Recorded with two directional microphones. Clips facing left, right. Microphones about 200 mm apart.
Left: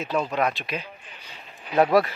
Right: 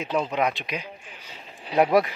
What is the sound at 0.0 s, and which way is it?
Speech, 20° right (ahead or behind).